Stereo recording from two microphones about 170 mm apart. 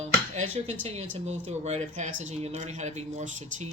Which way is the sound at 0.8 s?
40° right (ahead or behind).